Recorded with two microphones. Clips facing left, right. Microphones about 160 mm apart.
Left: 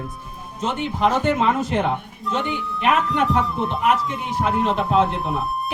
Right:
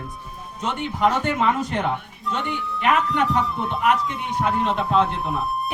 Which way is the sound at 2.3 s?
Centre (ahead or behind).